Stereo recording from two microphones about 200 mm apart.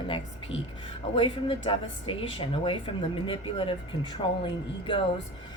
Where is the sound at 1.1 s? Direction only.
25° left (ahead or behind).